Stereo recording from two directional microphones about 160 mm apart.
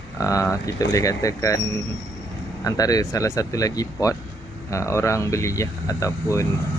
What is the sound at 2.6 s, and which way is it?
Speech, 20° left (ahead or behind).